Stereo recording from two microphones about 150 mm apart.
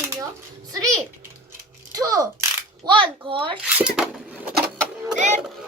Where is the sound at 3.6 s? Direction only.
5° right (ahead or behind).